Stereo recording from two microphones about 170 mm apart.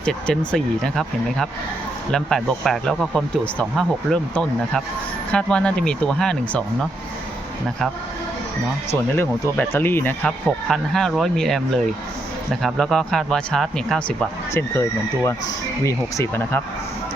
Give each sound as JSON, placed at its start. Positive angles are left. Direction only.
{"t": 0.0, "sound": "speech", "side_deg": 5}
{"t": 8.9, "sound": "speech", "side_deg": 15}
{"t": 14.5, "sound": "speech", "side_deg": 15}